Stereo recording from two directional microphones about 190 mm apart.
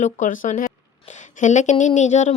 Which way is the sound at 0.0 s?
40° left (ahead or behind).